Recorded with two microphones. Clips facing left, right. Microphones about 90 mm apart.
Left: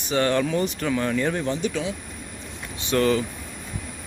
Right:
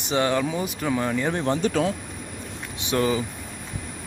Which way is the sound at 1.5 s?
45° right (ahead or behind).